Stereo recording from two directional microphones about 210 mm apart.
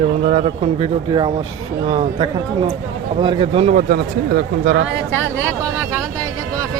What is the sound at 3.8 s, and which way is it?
Speech, 50° right (ahead or behind).